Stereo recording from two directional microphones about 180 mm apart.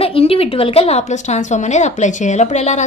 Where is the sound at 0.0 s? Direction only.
30° left (ahead or behind).